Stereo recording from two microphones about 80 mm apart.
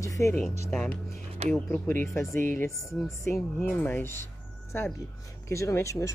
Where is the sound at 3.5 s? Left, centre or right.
Left.